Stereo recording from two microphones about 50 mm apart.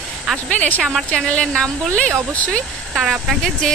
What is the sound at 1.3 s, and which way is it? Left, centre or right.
Speech, left.